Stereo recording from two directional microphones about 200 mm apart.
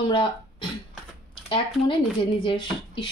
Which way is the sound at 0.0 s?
25° left (ahead or behind).